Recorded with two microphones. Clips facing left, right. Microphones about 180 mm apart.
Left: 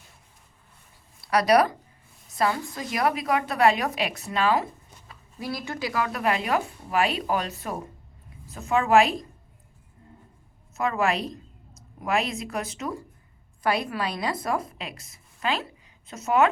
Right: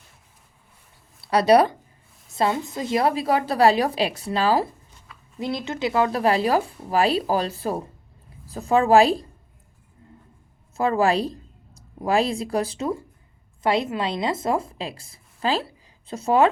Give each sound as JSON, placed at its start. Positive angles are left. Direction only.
{"t": 1.2, "sound": "a woman's voice", "side_deg": -30}
{"t": 5.4, "sound": "a woman's voice", "side_deg": -20}
{"t": 10.8, "sound": "a woman's voice", "side_deg": -30}